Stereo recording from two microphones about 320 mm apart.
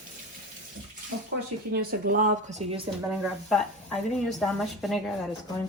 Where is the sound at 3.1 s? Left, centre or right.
Centre.